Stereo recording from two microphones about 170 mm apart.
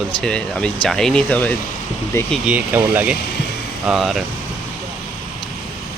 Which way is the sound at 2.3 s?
5° right (ahead or behind).